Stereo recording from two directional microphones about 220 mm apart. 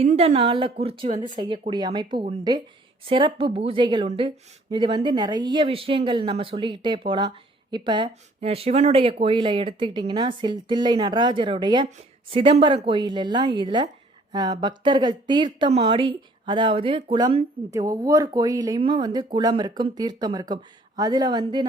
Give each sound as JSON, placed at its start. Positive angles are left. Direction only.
{"t": 0.0, "sound": "a woman's voice", "side_deg": -30}